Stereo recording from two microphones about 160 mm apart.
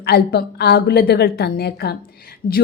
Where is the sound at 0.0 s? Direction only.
80° left.